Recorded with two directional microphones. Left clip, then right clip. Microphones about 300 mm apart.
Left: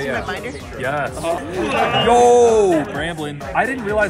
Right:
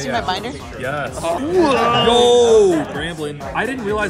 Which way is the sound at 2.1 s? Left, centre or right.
Centre.